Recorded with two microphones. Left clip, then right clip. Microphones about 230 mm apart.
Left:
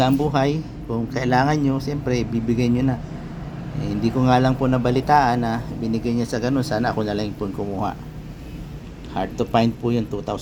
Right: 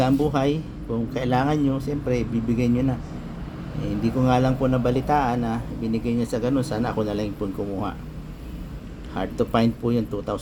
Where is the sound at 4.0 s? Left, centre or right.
Centre.